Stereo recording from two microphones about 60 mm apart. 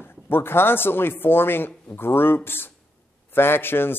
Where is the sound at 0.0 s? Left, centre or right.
Left.